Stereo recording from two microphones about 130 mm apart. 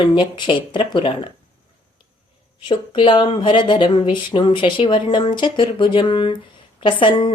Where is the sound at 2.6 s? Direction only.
40° left (ahead or behind).